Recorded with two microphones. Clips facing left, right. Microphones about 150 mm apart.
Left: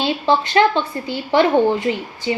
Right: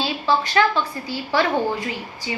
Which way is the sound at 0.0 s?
25° left (ahead or behind).